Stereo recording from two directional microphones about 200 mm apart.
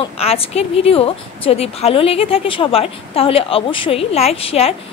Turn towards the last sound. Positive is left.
turn(degrees=30)  # may be behind; listen again after turning